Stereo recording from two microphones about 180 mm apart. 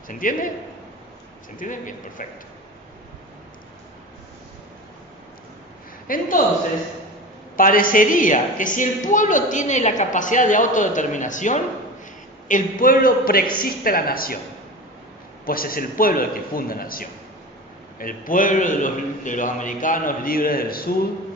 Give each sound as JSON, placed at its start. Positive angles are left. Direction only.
{"t": 0.1, "sound": "a woman's voice", "side_deg": 50}
{"t": 1.5, "sound": "a woman's voice", "side_deg": 45}
{"t": 6.1, "sound": "a woman's voice", "side_deg": 50}
{"t": 7.5, "sound": "a woman's voice", "side_deg": 50}
{"t": 15.4, "sound": "a woman's voice", "side_deg": 55}